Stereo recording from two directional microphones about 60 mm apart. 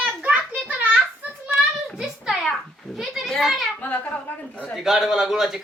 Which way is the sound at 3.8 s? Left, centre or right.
Left.